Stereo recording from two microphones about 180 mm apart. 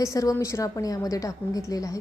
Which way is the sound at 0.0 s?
20° left (ahead or behind).